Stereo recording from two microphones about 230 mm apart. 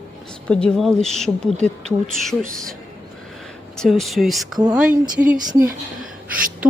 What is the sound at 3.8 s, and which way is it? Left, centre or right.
A woman's voice, centre.